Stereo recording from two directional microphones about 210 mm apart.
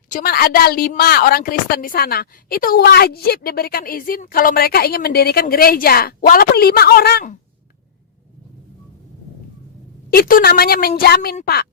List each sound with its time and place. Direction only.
0.1 s a woman's voice: 45° left (ahead or behind)
10.1 s a woman's voice: 45° left (ahead or behind)